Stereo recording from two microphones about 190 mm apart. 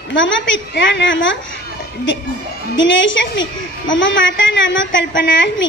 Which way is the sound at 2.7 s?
75° left (ahead or behind).